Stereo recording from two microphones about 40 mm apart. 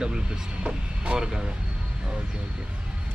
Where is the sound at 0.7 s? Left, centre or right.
Right.